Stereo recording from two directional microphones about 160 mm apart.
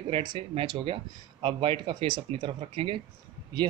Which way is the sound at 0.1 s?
30° right (ahead or behind).